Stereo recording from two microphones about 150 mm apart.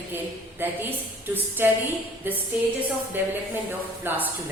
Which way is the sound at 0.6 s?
15° right (ahead or behind).